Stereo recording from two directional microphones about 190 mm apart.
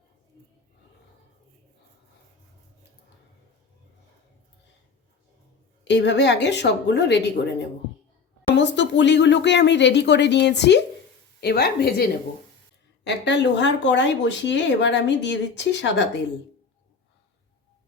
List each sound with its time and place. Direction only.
5.9 s speech: 65° left (ahead or behind)
13.1 s speech: 65° left (ahead or behind)